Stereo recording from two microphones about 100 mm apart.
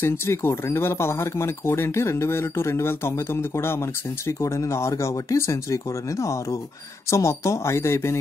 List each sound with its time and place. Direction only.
0.0 s speech: 25° left (ahead or behind)